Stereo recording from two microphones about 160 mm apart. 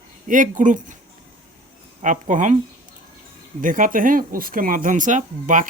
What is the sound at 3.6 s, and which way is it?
Speech, 55° right (ahead or behind).